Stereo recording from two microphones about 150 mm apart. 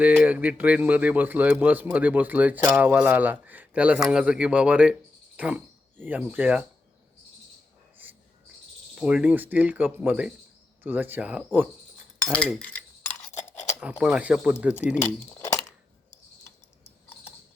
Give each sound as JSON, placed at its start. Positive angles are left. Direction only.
{"t": 0.0, "sound": "speech", "side_deg": -10}
{"t": 8.0, "sound": "cricket", "side_deg": -10}
{"t": 9.0, "sound": "speech", "side_deg": -5}
{"t": 12.5, "sound": "cutlery", "side_deg": 10}
{"t": 13.3, "sound": "a sound", "side_deg": 50}
{"t": 14.0, "sound": "speech", "side_deg": -10}
{"t": 15.0, "sound": "keys jangling", "side_deg": 20}